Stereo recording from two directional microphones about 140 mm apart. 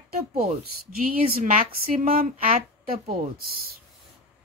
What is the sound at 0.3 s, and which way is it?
A woman's voice, 90° right.